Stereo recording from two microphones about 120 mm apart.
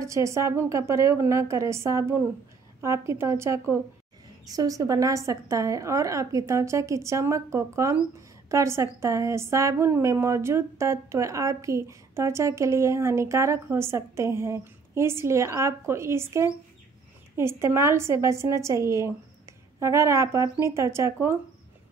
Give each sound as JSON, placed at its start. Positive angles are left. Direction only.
{"t": 0.0, "sound": "a woman's voice", "side_deg": -25}